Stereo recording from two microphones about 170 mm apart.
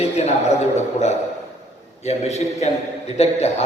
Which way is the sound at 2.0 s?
40° left (ahead or behind).